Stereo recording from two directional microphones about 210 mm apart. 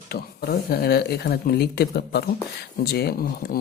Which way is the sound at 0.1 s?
45° left (ahead or behind).